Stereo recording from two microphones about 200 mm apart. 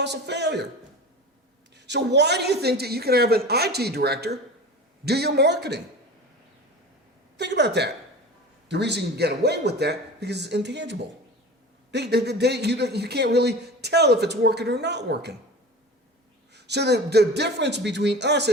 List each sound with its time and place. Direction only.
0.0 s a man's voice: 60° right (ahead or behind)
1.7 s a woman's voice: 60° right (ahead or behind)
7.3 s a man's voice: 60° right (ahead or behind)
16.6 s a man's voice: 55° right (ahead or behind)